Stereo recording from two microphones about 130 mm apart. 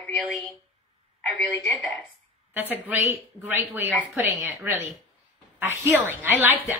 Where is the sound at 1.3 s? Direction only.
Centre (ahead or behind).